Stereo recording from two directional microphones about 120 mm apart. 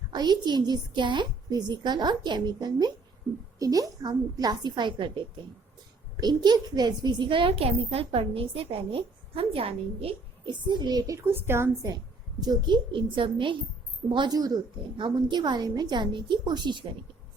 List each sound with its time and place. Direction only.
0.1 s a woman's voice: 35° right (ahead or behind); by 11.9 s 20° right (ahead or behind)
12.4 s a child's voice: 35° right (ahead or behind)